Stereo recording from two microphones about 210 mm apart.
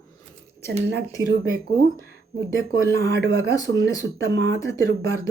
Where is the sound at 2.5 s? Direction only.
15° left (ahead or behind).